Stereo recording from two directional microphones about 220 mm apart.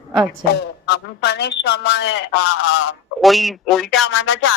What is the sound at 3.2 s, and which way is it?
Speech, centre (ahead or behind).